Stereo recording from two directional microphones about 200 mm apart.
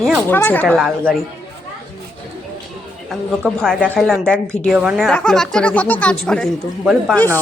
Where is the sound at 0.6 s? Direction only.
Centre (ahead or behind).